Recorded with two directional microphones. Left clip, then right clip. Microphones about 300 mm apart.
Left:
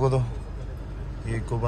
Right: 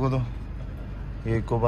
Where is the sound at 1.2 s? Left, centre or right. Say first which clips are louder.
Right 6 dB; centre.